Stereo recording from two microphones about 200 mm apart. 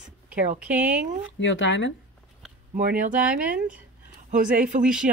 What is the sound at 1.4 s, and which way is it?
Speech, 65° left (ahead or behind).